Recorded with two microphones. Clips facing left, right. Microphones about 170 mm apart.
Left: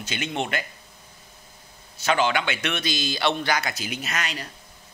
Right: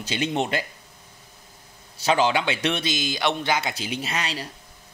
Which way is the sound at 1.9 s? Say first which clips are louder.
Right 2 dB; 35° right (ahead or behind).